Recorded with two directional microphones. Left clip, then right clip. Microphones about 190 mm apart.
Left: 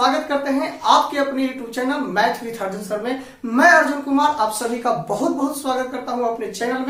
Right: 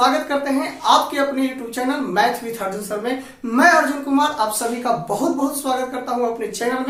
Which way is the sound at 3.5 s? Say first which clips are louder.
Left 1 dB; centre (ahead or behind).